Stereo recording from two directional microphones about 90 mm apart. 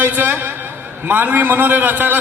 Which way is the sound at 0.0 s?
20° right (ahead or behind).